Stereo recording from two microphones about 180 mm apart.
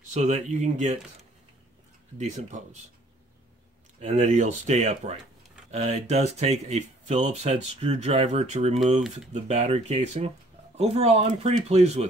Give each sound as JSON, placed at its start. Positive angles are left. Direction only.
{"t": 0.1, "sound": "speech", "side_deg": -40}
{"t": 2.1, "sound": "speech", "side_deg": -40}
{"t": 4.0, "sound": "speech", "side_deg": -40}